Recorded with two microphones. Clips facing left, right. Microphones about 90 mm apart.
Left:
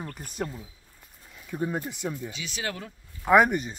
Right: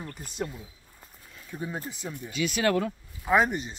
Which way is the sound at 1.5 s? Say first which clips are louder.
Left 5 dB; 60° left (ahead or behind).